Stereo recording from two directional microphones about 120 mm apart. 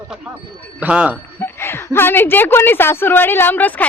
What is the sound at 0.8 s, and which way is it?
Speech, 10° right (ahead or behind).